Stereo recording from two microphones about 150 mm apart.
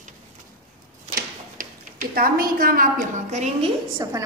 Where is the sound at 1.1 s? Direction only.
70° right (ahead or behind); by 3.7 s 45° right (ahead or behind).